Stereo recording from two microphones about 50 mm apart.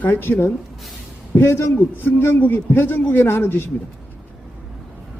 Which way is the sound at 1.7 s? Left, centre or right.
Left.